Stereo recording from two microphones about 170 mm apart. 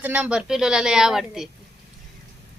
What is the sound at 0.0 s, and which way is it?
Speech, 10° right (ahead or behind).